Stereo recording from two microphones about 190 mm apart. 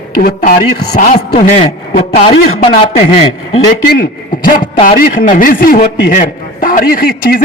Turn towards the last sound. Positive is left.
turn(degrees=50)  # may be behind; listen again after turning